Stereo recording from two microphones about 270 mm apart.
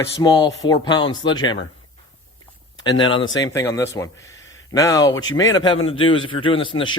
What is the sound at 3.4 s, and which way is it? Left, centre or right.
A man's voice, centre.